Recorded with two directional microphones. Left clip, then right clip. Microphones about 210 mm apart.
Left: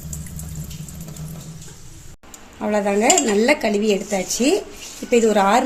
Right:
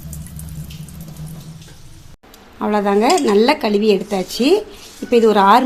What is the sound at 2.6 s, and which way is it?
Speech, 35° right (ahead or behind).